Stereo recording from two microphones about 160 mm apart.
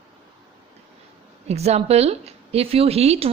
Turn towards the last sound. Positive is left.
turn(degrees=-40)  # may be behind; listen again after turning